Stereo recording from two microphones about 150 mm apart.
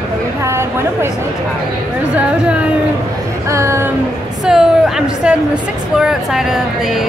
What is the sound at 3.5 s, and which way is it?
Speech, 20° right (ahead or behind).